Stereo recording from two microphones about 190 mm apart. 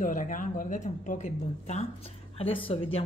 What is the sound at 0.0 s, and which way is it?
Speech, 45° left (ahead or behind).